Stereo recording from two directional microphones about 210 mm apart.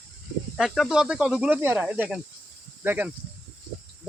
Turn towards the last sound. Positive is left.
turn(degrees=-10)  # may be behind; listen again after turning